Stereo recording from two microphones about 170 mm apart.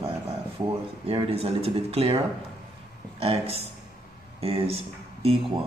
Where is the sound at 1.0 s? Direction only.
35° right (ahead or behind).